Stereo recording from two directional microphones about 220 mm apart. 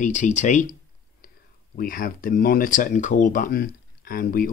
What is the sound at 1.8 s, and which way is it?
Speech, 40° left (ahead or behind).